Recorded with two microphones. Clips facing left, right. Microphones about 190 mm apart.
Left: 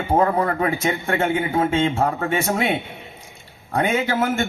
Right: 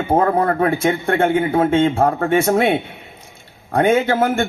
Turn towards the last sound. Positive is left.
turn(degrees=-55)  # may be behind; listen again after turning